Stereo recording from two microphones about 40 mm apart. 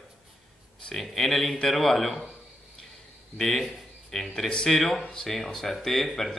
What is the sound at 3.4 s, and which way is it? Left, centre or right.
A man's voice, centre.